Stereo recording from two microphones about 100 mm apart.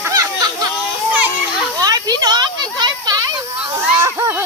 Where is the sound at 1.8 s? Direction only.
40° right (ahead or behind).